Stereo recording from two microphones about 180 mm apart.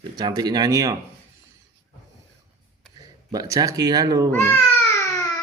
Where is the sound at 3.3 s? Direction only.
20° right (ahead or behind).